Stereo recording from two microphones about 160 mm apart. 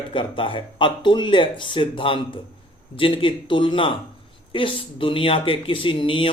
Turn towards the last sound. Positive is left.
turn(degrees=35)  # may be behind; listen again after turning